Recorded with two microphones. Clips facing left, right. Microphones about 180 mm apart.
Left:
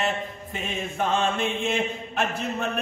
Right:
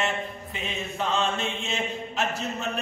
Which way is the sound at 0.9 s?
50° left (ahead or behind).